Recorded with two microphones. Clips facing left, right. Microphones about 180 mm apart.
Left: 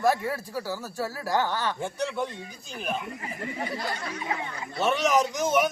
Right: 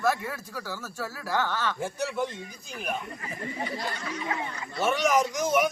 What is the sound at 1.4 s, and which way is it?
Speech, 15° left (ahead or behind).